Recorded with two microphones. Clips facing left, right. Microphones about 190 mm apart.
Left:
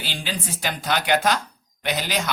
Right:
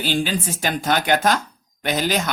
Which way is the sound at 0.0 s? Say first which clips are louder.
Right 8 dB; 45° right (ahead or behind).